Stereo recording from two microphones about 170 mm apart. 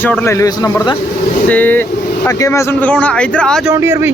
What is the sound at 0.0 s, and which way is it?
Speech, 10° left (ahead or behind).